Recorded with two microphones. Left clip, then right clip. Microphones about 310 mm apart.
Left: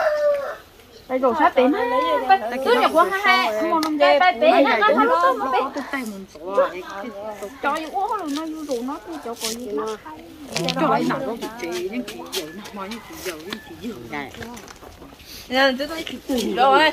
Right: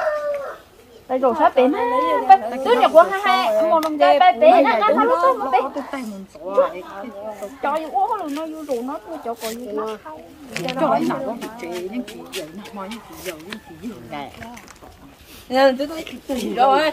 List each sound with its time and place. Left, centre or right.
1.0 s speech: right
10.8 s speech: right
15.5 s speech: right